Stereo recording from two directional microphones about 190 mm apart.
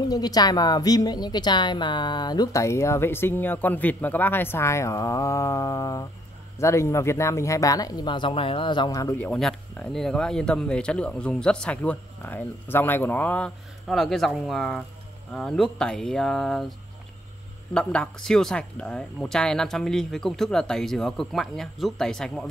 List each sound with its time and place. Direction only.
0.1 s a woman's voice: 20° left (ahead or behind)
9.3 s speech: 5° left (ahead or behind)
17.7 s speech: 5° left (ahead or behind)